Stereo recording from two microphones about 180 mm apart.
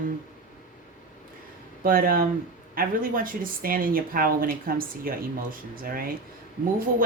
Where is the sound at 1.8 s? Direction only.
55° right (ahead or behind).